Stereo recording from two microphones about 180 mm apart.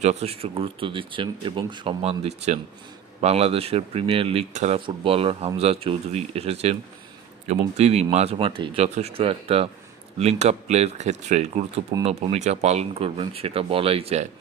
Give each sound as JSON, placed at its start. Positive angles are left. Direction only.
{"t": 0.0, "sound": "speech", "side_deg": -35}